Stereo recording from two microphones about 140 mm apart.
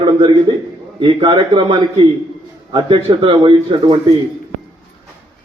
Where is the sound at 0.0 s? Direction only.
35° right (ahead or behind).